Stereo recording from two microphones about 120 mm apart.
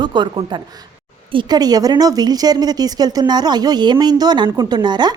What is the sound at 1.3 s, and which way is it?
A woman's voice, 35° right (ahead or behind).